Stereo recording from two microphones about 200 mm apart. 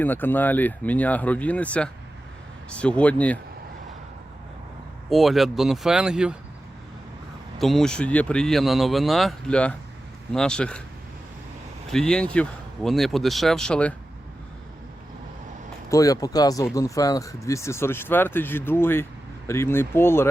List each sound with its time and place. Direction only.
0.0 s speech: 10° left (ahead or behind)
5.0 s speech: centre (ahead or behind)
7.6 s speech: centre (ahead or behind)
11.9 s speech: 5° left (ahead or behind)
15.9 s speech: 15° left (ahead or behind)